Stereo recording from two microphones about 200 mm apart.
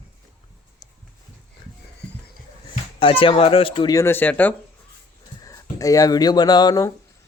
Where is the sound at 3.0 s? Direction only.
25° left (ahead or behind).